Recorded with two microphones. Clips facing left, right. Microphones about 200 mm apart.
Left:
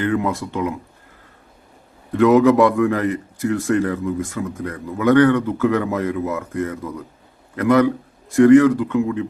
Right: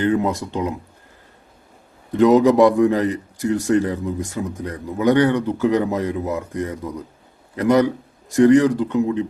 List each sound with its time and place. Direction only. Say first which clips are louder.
0.0 s a man's voice: right 1 dB; 20° right (ahead or behind)
2.1 s a man's voice: even; 20° right (ahead or behind)